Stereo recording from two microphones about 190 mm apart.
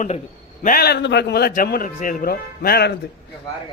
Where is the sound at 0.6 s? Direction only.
50° left (ahead or behind).